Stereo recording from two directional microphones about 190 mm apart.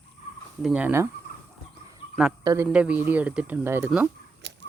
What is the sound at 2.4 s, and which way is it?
Speech, 15° right (ahead or behind).